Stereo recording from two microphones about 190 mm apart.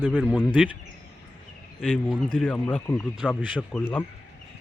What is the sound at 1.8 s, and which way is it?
Speech, centre (ahead or behind).